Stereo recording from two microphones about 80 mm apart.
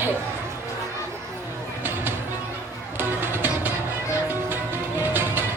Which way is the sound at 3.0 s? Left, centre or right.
Right.